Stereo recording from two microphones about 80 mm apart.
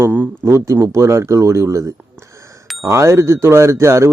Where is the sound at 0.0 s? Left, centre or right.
Right.